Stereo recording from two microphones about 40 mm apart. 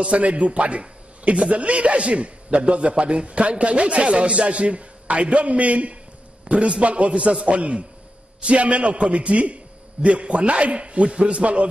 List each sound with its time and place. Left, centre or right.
0.0 s a man's voice: right